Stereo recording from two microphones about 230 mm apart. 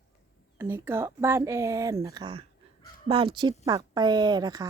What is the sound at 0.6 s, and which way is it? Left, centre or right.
A woman's voice, centre.